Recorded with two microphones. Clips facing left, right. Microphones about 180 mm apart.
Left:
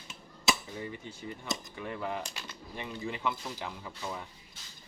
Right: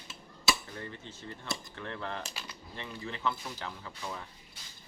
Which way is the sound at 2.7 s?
15° left (ahead or behind).